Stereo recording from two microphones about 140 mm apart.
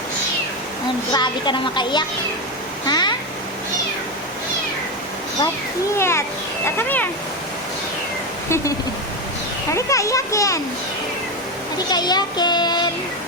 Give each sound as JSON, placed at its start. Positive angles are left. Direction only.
{"t": 1.1, "sound": "a child's voice", "side_deg": 35}
{"t": 6.0, "sound": "a child's voice", "side_deg": 20}
{"t": 8.4, "sound": "a child's voice", "side_deg": 20}
{"t": 9.7, "sound": "a child's voice", "side_deg": 20}
{"t": 11.9, "sound": "a child's voice", "side_deg": 30}